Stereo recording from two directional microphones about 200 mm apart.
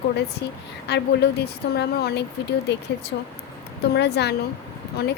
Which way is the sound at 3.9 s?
55° left (ahead or behind).